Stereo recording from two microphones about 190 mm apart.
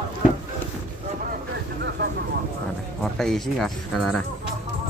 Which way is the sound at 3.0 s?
Centre (ahead or behind).